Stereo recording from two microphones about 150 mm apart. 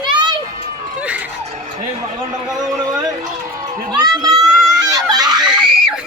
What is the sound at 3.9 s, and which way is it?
Children playing, 25° right (ahead or behind).